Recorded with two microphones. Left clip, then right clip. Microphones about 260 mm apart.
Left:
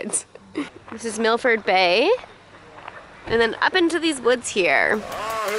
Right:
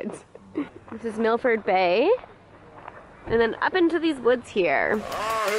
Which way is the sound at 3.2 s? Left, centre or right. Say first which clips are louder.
Left 3 dB; centre.